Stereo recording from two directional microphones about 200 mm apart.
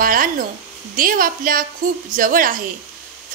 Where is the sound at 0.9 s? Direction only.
45° right (ahead or behind).